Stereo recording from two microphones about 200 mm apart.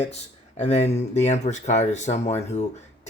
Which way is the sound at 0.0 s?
35° left (ahead or behind).